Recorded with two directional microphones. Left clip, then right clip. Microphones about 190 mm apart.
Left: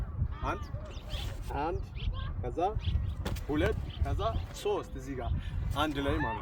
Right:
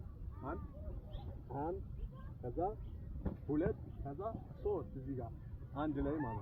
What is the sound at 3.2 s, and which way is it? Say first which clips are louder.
Speech: left 6 dB; 10° left (ahead or behind).